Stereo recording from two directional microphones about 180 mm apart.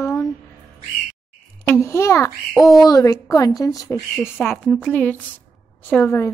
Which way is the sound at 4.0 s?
Centre (ahead or behind).